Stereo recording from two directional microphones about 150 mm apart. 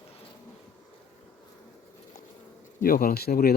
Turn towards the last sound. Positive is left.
turn(degrees=90)